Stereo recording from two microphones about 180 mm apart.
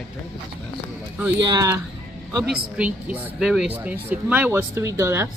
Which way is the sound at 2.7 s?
10° right (ahead or behind).